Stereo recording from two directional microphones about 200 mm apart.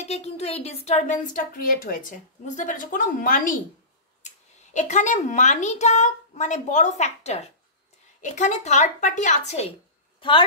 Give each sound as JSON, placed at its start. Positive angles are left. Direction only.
{"t": 0.0, "sound": "speech", "side_deg": 30}
{"t": 4.7, "sound": "speech", "side_deg": 35}